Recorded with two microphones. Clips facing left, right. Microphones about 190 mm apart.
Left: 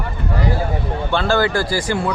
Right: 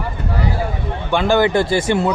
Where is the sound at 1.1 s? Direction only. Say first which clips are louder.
Right 3 dB; 15° right (ahead or behind).